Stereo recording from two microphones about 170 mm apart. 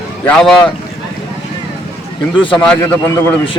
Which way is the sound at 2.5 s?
10° left (ahead or behind).